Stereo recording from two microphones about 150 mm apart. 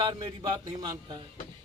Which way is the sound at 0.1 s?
25° right (ahead or behind).